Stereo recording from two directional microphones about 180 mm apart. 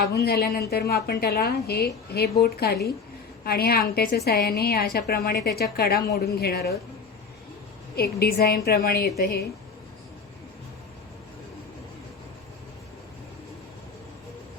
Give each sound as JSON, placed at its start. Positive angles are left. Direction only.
{"t": 0.1, "sound": "a woman's voice", "side_deg": 65}
{"t": 7.9, "sound": "a woman's voice", "side_deg": 60}